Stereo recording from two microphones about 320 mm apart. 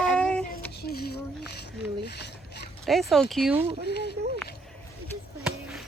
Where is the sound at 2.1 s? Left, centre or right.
Left.